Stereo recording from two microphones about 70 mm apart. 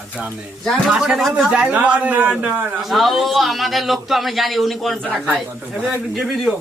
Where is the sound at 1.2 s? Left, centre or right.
Centre.